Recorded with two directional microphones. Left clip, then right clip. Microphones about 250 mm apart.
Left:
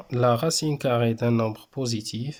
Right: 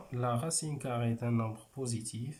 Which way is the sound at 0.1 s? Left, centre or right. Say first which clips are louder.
Left 13 dB; left.